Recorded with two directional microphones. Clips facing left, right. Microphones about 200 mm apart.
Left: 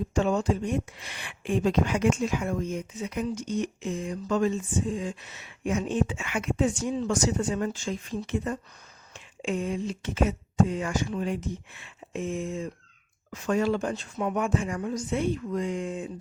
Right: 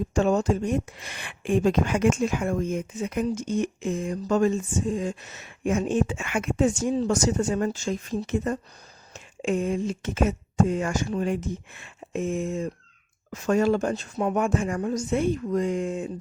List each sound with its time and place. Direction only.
0.1 s speech: 45° right (ahead or behind)